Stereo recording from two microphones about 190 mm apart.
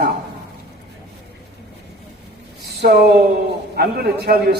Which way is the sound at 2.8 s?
60° right (ahead or behind).